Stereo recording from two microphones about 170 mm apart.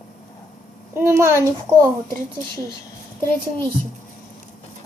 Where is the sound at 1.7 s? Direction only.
10° right (ahead or behind).